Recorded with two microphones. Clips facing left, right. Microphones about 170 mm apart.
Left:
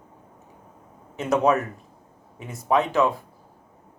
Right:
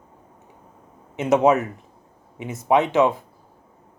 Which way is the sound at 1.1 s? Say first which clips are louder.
Right 4 dB; 20° right (ahead or behind).